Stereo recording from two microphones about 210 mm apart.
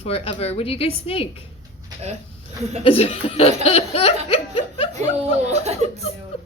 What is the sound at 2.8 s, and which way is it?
A woman's voice, 30° left (ahead or behind).